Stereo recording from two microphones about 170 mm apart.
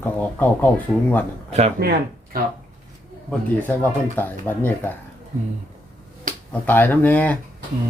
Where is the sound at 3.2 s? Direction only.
10° left (ahead or behind).